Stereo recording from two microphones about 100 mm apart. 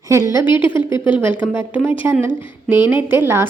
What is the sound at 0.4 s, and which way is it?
Speech, 55° left (ahead or behind).